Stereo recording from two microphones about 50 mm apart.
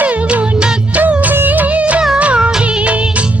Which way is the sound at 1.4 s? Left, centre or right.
Right.